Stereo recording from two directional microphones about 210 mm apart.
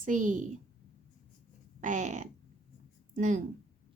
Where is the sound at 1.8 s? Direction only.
35° right (ahead or behind).